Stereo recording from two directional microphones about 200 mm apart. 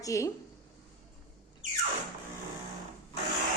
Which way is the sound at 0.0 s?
15° left (ahead or behind).